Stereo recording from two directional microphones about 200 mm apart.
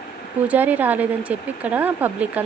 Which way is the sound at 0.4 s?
10° right (ahead or behind).